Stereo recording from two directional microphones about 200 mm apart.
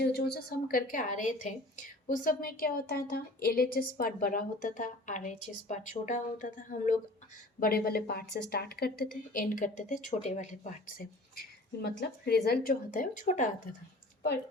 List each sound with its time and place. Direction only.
0.0 s a woman's voice: 55° left (ahead or behind)